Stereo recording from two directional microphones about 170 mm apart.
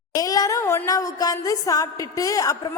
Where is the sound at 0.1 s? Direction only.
20° left (ahead or behind).